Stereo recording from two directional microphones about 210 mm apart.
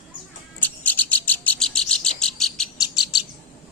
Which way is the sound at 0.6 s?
10° left (ahead or behind).